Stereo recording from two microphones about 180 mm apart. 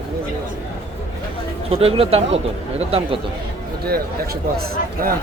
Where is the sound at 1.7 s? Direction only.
30° right (ahead or behind).